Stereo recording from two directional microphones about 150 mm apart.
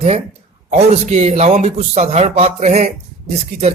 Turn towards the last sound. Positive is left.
turn(degrees=-45)  # may be behind; listen again after turning